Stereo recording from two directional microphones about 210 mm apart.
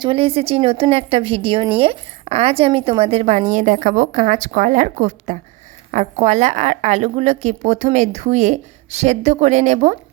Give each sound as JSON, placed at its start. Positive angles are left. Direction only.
{"t": 0.0, "sound": "a woman's voice", "side_deg": -25}